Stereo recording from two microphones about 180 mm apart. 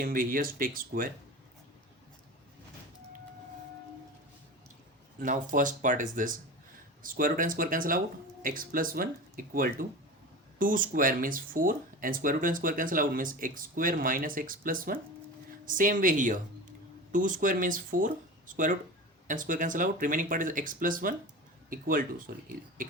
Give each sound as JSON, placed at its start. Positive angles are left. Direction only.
{"t": 0.0, "sound": "speech", "side_deg": -50}
{"t": 5.2, "sound": "speech", "side_deg": -45}